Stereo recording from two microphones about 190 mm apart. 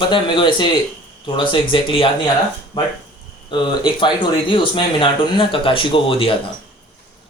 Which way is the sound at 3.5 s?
25° left (ahead or behind).